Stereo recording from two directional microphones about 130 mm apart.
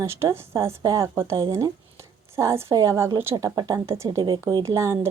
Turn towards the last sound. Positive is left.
turn(degrees=-20)  # may be behind; listen again after turning